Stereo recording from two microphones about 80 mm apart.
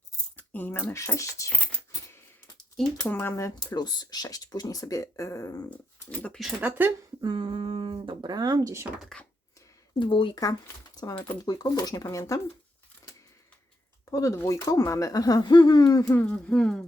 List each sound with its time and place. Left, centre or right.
0.3 s speech: left
0.9 s speech: left
3.1 s speech: left
3.7 s speech: left
5.6 s speech: centre
6.6 s speech: right
7.2 s speech: right
9.1 s speech: centre
10.0 s speech: left
11.1 s speech: left
11.4 s speech: left
14.0 s speech: left
16.1 s speech: centre
16.6 s speech: centre